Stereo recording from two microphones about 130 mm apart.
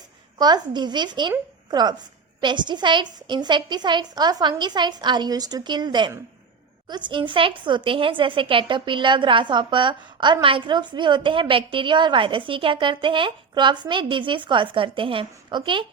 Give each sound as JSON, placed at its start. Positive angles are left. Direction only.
{"t": 0.3, "sound": "a woman's voice", "side_deg": -30}